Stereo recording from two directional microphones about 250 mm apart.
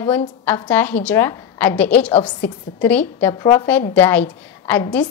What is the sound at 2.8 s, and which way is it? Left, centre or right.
A woman's voice, centre.